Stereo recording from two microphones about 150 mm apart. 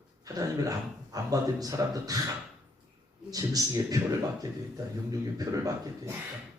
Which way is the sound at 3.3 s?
25° right (ahead or behind).